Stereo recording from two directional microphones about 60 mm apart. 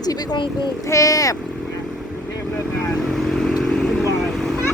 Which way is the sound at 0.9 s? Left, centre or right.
Left.